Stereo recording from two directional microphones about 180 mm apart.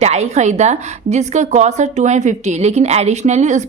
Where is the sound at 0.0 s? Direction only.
40° right (ahead or behind).